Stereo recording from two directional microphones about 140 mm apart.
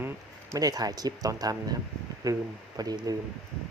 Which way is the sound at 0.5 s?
25° right (ahead or behind).